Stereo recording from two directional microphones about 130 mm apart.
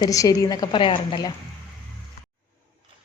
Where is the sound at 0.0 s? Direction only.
30° left (ahead or behind).